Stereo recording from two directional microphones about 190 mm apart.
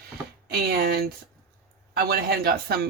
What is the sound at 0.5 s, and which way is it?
Speech, 50° right (ahead or behind).